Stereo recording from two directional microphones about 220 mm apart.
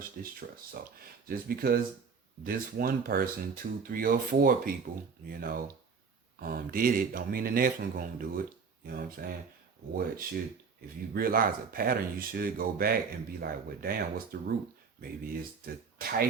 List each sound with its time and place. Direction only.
0.2 s speech: 40° right (ahead or behind)